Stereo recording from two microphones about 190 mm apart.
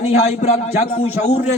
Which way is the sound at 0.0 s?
35° left (ahead or behind).